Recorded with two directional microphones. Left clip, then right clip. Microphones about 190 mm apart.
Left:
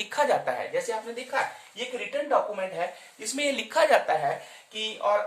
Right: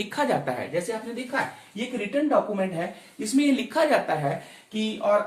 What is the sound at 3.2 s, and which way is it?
Speech, 40° left (ahead or behind).